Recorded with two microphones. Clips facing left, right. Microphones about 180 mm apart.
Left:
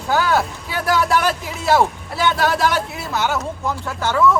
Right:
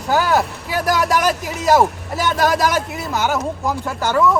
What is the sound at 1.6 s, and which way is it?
Speech, 40° right (ahead or behind).